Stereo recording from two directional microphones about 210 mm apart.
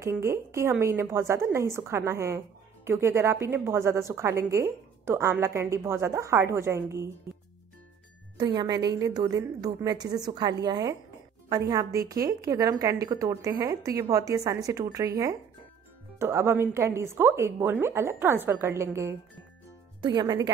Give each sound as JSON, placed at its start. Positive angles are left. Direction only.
{"t": 0.0, "sound": "a woman's voice", "side_deg": -15}
{"t": 8.4, "sound": "a woman's voice", "side_deg": -20}